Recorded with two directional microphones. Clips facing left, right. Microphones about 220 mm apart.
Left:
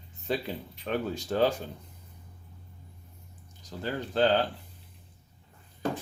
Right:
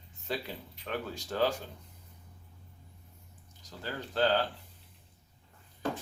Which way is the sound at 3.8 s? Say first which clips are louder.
Left 4 dB; 20° left (ahead or behind).